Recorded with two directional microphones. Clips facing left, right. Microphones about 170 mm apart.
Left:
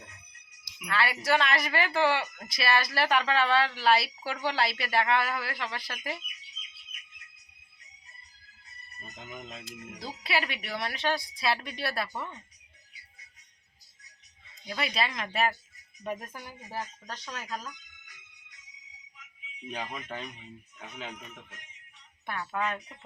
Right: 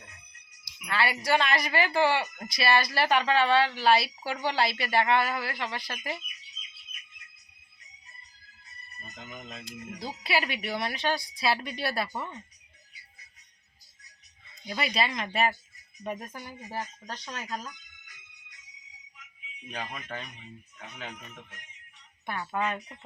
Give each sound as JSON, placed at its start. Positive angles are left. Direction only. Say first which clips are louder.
{"t": 0.9, "sound": "a woman's voice", "louder": "right 1 dB", "side_deg": 0}
{"t": 9.1, "sound": "speech", "louder": "even", "side_deg": 15}
{"t": 9.6, "sound": "a woman's voice", "louder": "right 3 dB", "side_deg": 0}
{"t": 14.7, "sound": "a woman's voice", "louder": "right 2 dB", "side_deg": 0}
{"t": 19.7, "sound": "speech", "louder": "even", "side_deg": 10}